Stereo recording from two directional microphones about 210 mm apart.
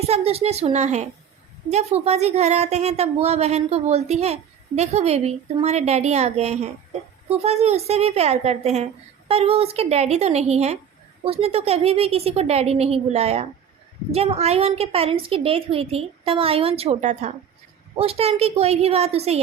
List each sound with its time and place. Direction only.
0.0 s a woman's voice: 30° right (ahead or behind)